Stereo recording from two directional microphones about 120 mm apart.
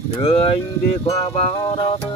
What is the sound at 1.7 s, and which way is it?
Music, 45° left (ahead or behind).